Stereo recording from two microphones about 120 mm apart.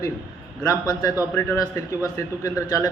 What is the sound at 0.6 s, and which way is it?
A man's voice, 25° left (ahead or behind).